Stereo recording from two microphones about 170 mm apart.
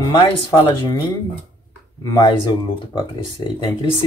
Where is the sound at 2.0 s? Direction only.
25° left (ahead or behind).